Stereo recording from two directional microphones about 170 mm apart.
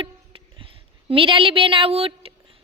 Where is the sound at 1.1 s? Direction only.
30° right (ahead or behind).